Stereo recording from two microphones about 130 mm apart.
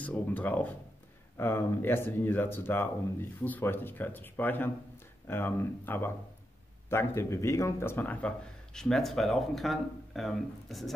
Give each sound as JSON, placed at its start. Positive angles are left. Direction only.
{"t": 0.0, "sound": "speech", "side_deg": 10}